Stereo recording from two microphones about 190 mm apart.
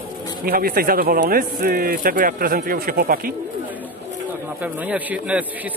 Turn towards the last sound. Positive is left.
turn(degrees=-5)  # may be behind; listen again after turning